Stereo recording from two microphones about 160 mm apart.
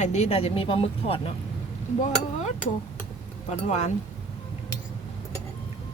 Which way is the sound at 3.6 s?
45° left (ahead or behind).